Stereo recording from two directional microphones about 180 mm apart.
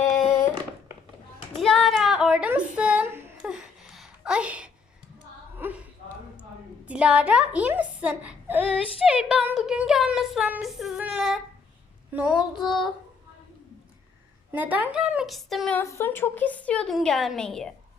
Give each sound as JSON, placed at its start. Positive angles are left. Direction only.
{"t": 0.2, "sound": "a sound", "side_deg": 20}
{"t": 1.5, "sound": "a sound", "side_deg": 0}
{"t": 6.8, "sound": "a child's voice", "side_deg": -5}
{"t": 12.5, "sound": "speech", "side_deg": 0}
{"t": 14.5, "sound": "speech", "side_deg": -10}
{"t": 15.8, "sound": "a woman's voice", "side_deg": 15}